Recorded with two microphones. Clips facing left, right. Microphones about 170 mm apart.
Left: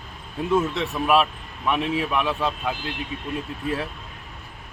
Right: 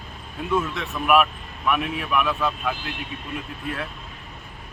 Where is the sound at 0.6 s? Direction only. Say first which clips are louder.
Left 3 dB; 30° left (ahead or behind).